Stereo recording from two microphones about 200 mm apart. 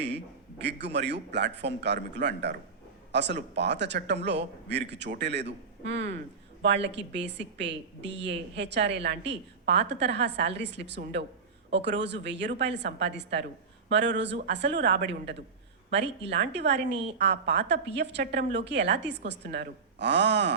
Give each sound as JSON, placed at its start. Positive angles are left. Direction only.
{"t": 0.6, "sound": "a woman's voice", "side_deg": -60}